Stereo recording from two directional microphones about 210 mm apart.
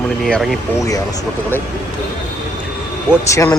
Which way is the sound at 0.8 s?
15° left (ahead or behind).